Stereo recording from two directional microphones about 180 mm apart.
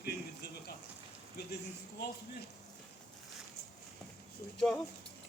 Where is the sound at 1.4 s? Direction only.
65° left (ahead or behind).